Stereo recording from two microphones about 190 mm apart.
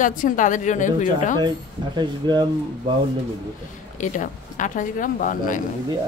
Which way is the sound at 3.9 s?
40° left (ahead or behind).